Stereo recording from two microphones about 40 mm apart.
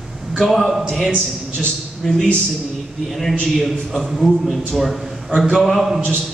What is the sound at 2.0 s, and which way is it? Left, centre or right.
Speech, centre.